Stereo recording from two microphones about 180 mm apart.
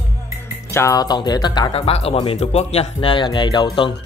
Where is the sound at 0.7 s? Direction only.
20° left (ahead or behind).